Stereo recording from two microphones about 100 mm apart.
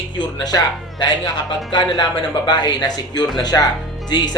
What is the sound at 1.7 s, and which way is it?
Speech, 55° left (ahead or behind).